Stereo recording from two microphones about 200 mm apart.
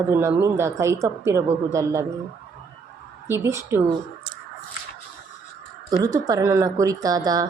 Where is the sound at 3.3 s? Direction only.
15° right (ahead or behind).